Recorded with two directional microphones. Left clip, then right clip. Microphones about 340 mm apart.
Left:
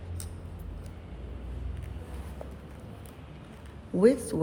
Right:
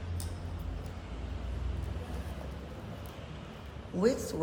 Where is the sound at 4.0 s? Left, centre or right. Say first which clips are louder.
Left 6 dB; left.